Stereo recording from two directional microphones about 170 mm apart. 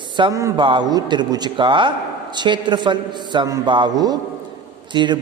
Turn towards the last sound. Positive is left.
turn(degrees=-25)  # may be behind; listen again after turning